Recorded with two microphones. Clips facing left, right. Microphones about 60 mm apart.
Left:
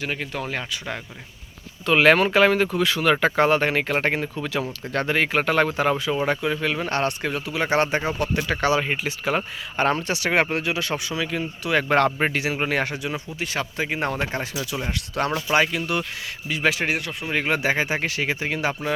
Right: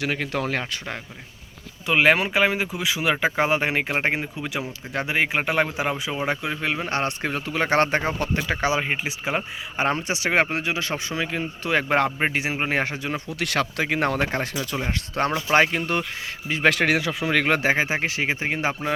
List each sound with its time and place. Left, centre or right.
0.2 s speech: right
1.9 s speech: centre; by 8.3 s right
8.6 s speech: right
11.9 s speech: centre
12.3 s speech: right
13.4 s speech: right
16.6 s speech: right
17.6 s speech: right